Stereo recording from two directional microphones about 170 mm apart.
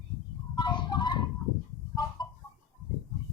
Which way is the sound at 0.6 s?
25° left (ahead or behind).